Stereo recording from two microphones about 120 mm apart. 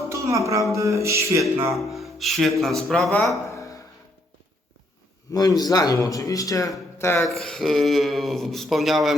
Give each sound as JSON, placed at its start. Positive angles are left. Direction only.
{"t": 0.1, "sound": "music", "side_deg": -25}
{"t": 1.7, "sound": "speech", "side_deg": 0}
{"t": 3.2, "sound": "a sound", "side_deg": 25}
{"t": 5.3, "sound": "speech", "side_deg": 30}
{"t": 7.2, "sound": "speech", "side_deg": 5}